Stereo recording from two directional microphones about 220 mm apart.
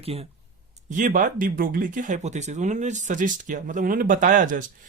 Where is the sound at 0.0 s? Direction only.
25° right (ahead or behind).